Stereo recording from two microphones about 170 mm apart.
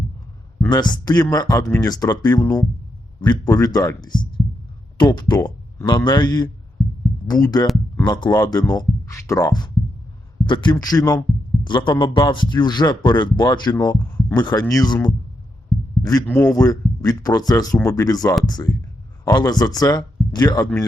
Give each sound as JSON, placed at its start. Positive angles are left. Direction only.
{"t": 0.7, "sound": "a man's voice", "side_deg": 25}